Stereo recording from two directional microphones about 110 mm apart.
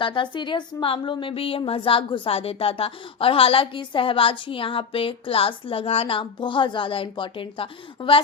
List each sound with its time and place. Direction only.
0.0 s a woman's voice: 50° left (ahead or behind)